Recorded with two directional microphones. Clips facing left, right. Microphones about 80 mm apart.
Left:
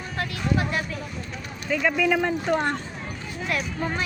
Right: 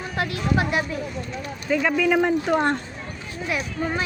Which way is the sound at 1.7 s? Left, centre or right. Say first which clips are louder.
Right 2 dB; centre.